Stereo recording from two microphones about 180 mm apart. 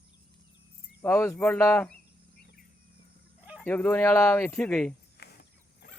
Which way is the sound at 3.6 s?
5° left (ahead or behind).